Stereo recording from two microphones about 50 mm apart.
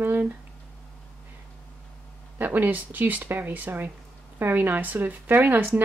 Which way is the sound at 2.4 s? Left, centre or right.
Right.